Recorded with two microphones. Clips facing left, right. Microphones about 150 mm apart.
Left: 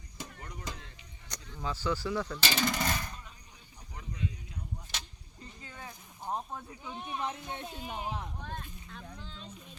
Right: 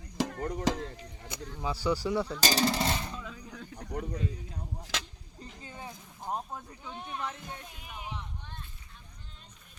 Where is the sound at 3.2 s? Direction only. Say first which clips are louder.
Right 12 dB; 90° right.